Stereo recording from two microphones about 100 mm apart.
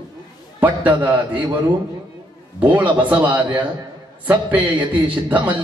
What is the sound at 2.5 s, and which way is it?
A man's voice, 15° right (ahead or behind).